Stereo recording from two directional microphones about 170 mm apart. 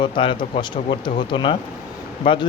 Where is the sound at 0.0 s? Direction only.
30° left (ahead or behind).